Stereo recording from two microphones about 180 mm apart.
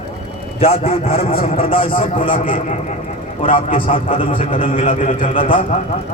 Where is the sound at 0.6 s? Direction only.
35° left (ahead or behind).